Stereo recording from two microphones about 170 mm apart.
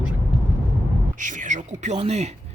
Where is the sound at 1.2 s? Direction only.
45° right (ahead or behind).